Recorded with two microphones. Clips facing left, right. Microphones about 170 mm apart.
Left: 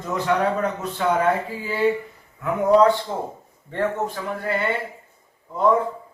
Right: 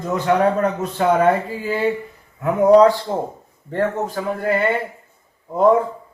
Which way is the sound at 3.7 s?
45° right (ahead or behind).